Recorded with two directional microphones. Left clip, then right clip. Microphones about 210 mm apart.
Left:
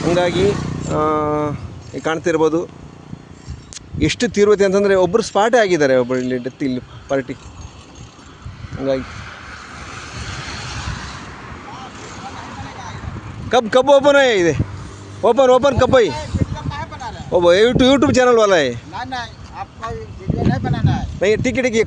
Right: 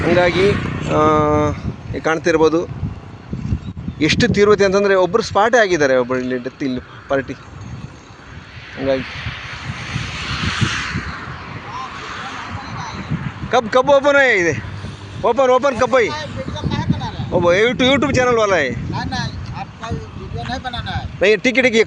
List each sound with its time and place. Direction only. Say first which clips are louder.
0.0 s speech: right 2 dB; centre (ahead or behind)
4.0 s speech: right 1 dB; centre (ahead or behind)
9.0 s vehicle: right 5 dB; 55° left (ahead or behind)
10.8 s a sound: right 4 dB; 25° left (ahead or behind)
13.5 s speech: left 1 dB; 25° left (ahead or behind)
16.6 s a sound: right 3 dB; 5° left (ahead or behind)
17.3 s speech: left 2 dB; 30° left (ahead or behind)
18.9 s a sound: right 1 dB; 10° right (ahead or behind)
20.5 s speech: right 1 dB; 25° right (ahead or behind)
21.2 s speech: right 3 dB; centre (ahead or behind)